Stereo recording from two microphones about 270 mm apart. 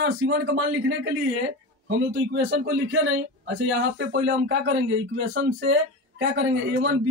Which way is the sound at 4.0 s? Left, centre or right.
Right.